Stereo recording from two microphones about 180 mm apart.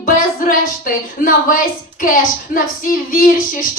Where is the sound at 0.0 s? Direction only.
50° left (ahead or behind).